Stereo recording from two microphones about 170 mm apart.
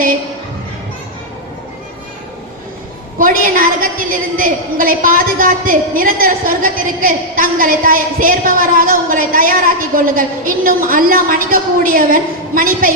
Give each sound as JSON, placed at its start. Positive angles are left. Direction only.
{"t": 3.2, "sound": "a woman's voice", "side_deg": -55}